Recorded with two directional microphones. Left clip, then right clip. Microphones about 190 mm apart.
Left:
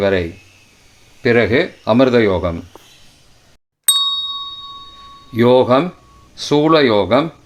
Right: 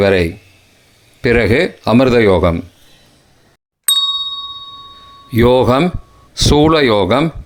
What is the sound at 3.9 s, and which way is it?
Ding, centre (ahead or behind).